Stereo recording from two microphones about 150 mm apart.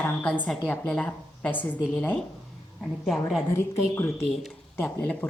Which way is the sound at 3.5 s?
15° left (ahead or behind).